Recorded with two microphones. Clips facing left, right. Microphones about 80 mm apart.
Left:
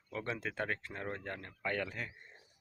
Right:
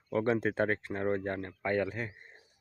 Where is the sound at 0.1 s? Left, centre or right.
Right.